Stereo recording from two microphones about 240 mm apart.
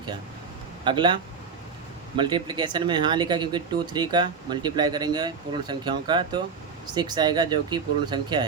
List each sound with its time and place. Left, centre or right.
0.9 s speech: centre